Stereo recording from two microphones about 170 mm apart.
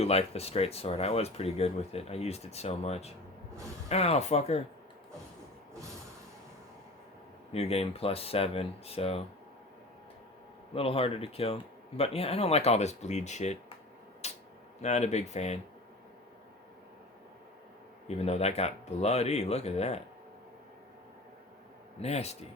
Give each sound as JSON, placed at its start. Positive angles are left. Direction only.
{"t": 0.0, "sound": "speech", "side_deg": 35}
{"t": 7.5, "sound": "speech", "side_deg": 35}
{"t": 10.8, "sound": "speech", "side_deg": 35}
{"t": 14.2, "sound": "a sound", "side_deg": 40}
{"t": 14.8, "sound": "speech", "side_deg": 40}
{"t": 18.1, "sound": "speech", "side_deg": 40}
{"t": 22.0, "sound": "speech", "side_deg": 40}